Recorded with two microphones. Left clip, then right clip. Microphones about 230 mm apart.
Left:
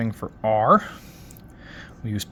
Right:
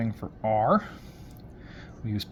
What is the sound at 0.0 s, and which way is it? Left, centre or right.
Speech, left.